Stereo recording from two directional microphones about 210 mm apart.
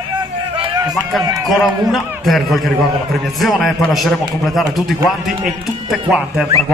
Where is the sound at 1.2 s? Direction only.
15° right (ahead or behind).